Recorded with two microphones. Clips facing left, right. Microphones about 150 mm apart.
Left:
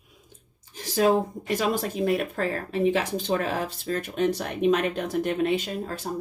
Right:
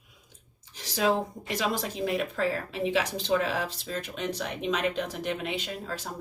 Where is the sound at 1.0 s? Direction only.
50° left (ahead or behind).